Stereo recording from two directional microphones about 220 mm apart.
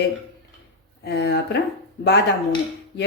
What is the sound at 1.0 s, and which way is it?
Speech, 50° left (ahead or behind).